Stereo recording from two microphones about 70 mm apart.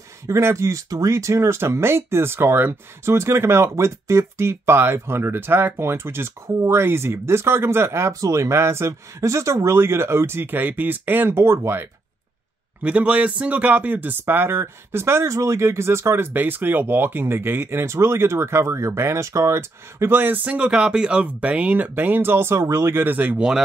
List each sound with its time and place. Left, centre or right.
0.3 s speech: right
12.8 s speech: centre; by 20.1 s right
20.1 s speech: right